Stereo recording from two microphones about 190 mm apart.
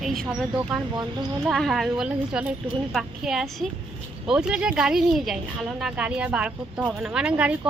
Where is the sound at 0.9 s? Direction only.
25° right (ahead or behind).